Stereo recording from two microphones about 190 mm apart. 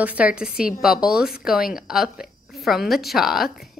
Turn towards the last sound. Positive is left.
turn(degrees=0)  # may be behind; listen again after turning